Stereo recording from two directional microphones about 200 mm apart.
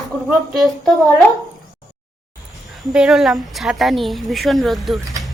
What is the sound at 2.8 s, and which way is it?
A woman's voice, 5° right (ahead or behind).